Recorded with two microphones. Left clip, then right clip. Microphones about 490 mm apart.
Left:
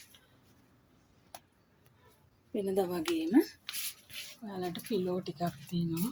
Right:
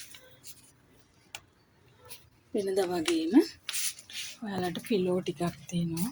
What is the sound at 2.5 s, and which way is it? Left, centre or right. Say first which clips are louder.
A woman's voice: right 3 dB; left.